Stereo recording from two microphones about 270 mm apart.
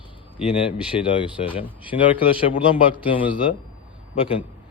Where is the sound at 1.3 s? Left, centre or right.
Centre.